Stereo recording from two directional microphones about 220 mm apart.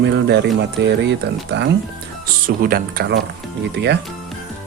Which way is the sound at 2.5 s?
40° right (ahead or behind).